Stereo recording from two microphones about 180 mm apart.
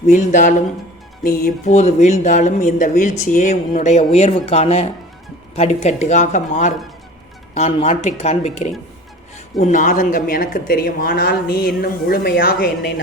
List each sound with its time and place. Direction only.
0.1 s speech: 45° left (ahead or behind)